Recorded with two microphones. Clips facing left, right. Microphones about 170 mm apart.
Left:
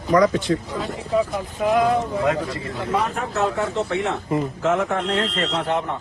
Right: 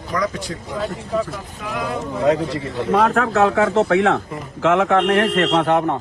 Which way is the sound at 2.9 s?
75° right (ahead or behind).